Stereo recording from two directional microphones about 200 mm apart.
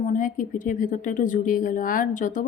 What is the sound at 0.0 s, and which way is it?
Speech, 40° left (ahead or behind).